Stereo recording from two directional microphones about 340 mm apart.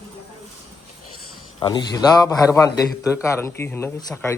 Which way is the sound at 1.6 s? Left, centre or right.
Centre.